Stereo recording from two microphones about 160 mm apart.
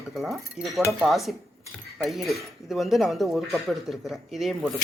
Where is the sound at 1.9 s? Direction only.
Centre (ahead or behind).